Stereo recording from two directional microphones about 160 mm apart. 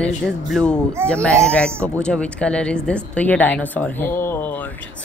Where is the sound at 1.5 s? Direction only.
5° left (ahead or behind).